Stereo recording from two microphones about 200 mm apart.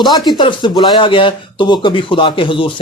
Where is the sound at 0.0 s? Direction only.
20° left (ahead or behind).